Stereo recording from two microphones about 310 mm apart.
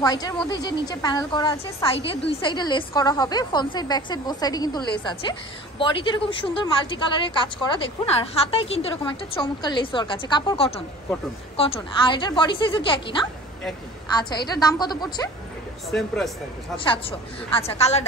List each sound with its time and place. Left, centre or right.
0.0 s a woman's voice: centre
16.7 s a woman's voice: centre